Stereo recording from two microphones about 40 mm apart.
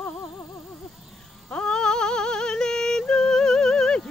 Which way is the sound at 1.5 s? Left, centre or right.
Left.